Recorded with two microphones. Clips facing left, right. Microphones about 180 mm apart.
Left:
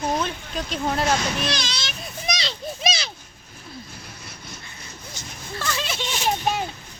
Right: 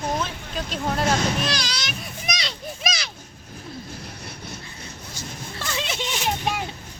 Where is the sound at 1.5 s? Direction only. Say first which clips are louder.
Even; 25° left (ahead or behind).